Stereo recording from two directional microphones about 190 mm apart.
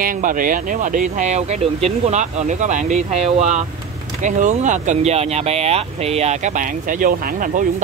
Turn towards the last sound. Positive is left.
turn(degrees=-45)  # may be behind; listen again after turning